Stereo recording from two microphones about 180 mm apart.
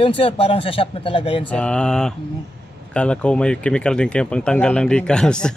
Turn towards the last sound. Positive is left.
turn(degrees=5)  # may be behind; listen again after turning